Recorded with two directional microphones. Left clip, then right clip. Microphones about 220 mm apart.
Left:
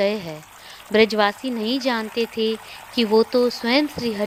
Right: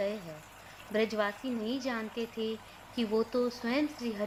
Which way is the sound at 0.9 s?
40° left (ahead or behind).